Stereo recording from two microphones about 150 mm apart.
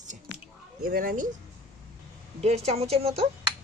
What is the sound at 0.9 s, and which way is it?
Speech, 70° right (ahead or behind).